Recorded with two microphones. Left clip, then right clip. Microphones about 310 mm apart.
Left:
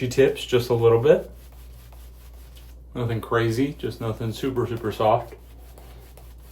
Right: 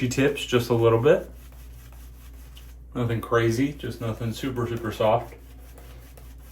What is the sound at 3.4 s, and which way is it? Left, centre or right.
Speech, centre.